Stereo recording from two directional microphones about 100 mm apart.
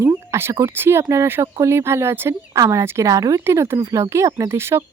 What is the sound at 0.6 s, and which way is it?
Speech, 25° right (ahead or behind).